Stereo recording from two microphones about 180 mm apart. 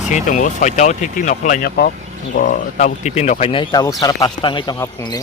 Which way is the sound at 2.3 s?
45° left (ahead or behind).